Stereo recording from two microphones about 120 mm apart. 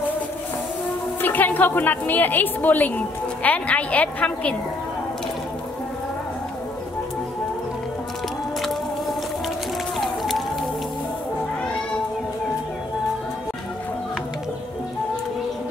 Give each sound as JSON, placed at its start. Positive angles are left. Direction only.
{"t": 1.2, "sound": "a woman's voice", "side_deg": 15}
{"t": 9.9, "sound": "music", "side_deg": 0}